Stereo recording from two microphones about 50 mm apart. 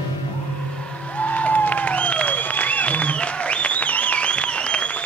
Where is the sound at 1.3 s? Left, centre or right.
Left.